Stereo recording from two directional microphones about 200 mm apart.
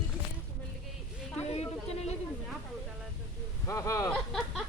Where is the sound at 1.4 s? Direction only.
30° left (ahead or behind).